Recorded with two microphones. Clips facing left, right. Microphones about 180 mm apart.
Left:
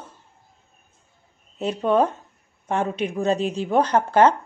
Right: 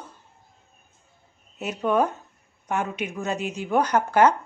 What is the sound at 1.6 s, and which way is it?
Speech, 30° left (ahead or behind).